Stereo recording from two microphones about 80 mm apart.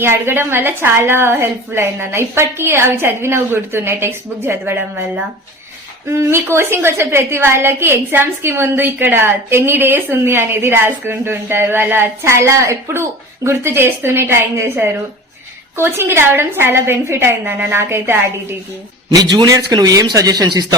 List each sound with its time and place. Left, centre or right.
0.0 s a woman's voice: right
6.1 s a woman's voice: right
19.1 s a man's voice: right
19.5 s speech: right